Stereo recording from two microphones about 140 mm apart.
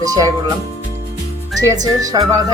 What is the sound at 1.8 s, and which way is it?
Speech, 25° right (ahead or behind).